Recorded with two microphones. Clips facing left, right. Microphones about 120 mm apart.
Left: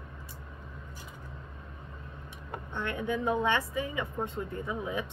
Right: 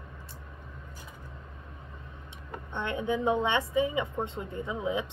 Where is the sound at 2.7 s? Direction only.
20° right (ahead or behind).